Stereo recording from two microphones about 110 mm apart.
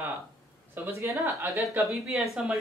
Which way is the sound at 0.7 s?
25° right (ahead or behind).